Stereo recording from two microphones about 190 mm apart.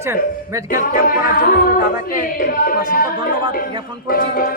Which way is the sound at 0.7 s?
50° left (ahead or behind).